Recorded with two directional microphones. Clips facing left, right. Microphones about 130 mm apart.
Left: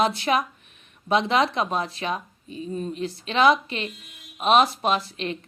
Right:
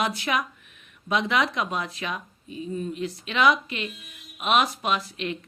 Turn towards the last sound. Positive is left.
turn(degrees=35)  # may be behind; listen again after turning